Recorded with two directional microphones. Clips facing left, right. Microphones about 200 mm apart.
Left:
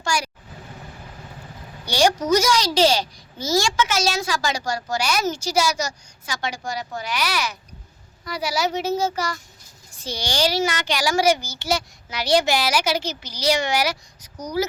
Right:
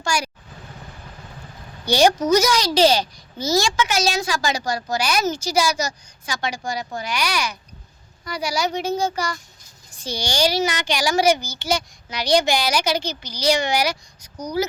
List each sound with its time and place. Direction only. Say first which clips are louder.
2.0 s a child's voice: right 2 dB; 20° right (ahead or behind)
5.5 s a child's voice: right 1 dB; centre (ahead or behind)
10.0 s a child's voice: right 1 dB; 15° right (ahead or behind)
11.7 s a child's voice: right 1 dB; 5° left (ahead or behind)